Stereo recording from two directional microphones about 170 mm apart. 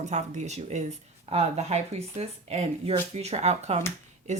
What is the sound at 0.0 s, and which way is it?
Speech, 45° right (ahead or behind).